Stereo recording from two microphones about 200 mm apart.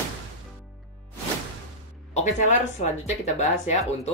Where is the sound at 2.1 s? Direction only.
35° left (ahead or behind).